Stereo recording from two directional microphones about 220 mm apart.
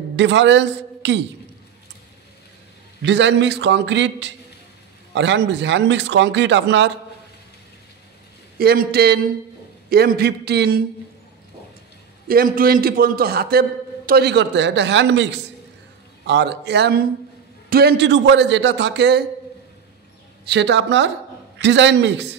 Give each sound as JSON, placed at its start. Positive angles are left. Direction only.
{"t": 0.1, "sound": "a woman's voice", "side_deg": -55}
{"t": 3.0, "sound": "a man's voice", "side_deg": -55}
{"t": 8.5, "sound": "a man's voice", "side_deg": -45}
{"t": 12.3, "sound": "a man's voice", "side_deg": -40}
{"t": 20.4, "sound": "a man's voice", "side_deg": -50}